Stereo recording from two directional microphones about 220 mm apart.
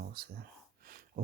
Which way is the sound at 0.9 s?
45° right (ahead or behind).